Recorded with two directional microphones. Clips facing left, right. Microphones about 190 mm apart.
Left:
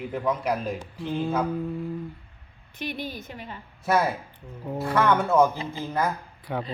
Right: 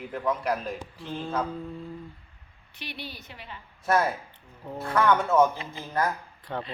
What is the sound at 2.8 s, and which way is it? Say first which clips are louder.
Speech: left 7 dB; 45° left (ahead or behind).